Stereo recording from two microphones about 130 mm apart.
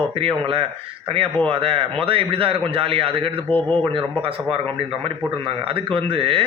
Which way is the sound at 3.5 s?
10° left (ahead or behind).